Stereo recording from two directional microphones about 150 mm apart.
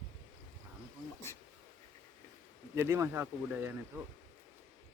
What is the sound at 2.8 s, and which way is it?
Speech, 15° right (ahead or behind).